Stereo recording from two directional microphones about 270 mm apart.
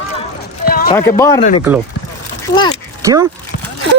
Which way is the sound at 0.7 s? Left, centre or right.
Left.